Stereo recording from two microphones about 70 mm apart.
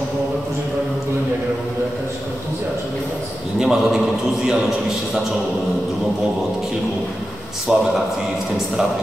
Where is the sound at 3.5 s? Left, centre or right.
Centre.